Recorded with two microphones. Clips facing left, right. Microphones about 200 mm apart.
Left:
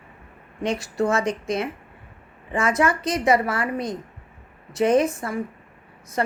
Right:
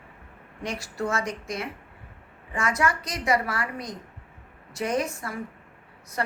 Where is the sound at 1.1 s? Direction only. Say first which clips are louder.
Left 7 dB; 25° left (ahead or behind).